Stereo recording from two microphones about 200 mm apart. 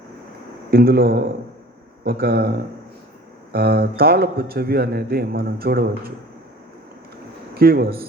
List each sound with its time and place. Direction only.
0.7 s a man's voice: 50° right (ahead or behind)
7.5 s a man's voice: 50° right (ahead or behind)